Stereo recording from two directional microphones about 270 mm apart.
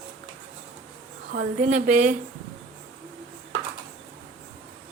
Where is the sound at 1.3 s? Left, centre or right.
Right.